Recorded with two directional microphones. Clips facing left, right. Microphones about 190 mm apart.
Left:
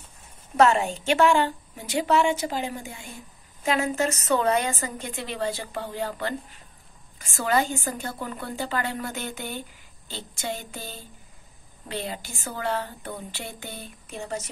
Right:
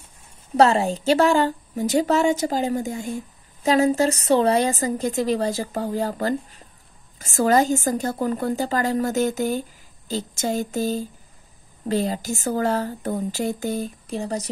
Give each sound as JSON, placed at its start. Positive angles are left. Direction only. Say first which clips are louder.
{"t": 0.6, "sound": "a woman's voice", "louder": "right 3 dB", "side_deg": -35}